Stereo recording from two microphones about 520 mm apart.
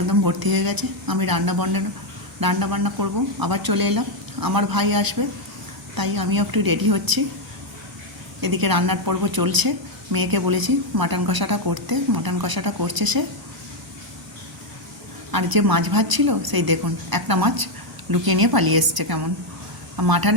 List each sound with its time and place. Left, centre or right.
0.1 s a woman's voice: right
8.4 s a woman's voice: right
15.3 s a woman's voice: right